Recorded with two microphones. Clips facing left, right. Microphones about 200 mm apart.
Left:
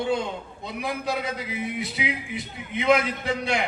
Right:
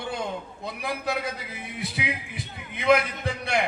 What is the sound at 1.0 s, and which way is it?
Speech, 60° right (ahead or behind).